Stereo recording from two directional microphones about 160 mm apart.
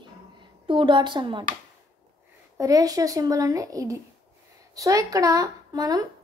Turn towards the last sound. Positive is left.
turn(degrees=-25)  # may be behind; listen again after turning